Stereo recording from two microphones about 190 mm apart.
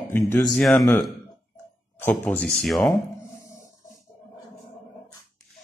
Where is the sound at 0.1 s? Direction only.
10° left (ahead or behind).